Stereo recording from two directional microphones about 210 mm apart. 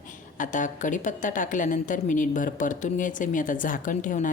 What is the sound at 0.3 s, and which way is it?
Speech, 40° left (ahead or behind).